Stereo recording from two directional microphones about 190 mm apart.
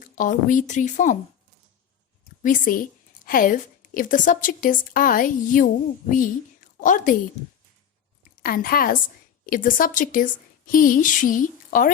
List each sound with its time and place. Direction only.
0.0 s a woman's voice: 45° left (ahead or behind)
2.4 s a woman's voice: 45° left (ahead or behind)
8.4 s a woman's voice: 50° left (ahead or behind)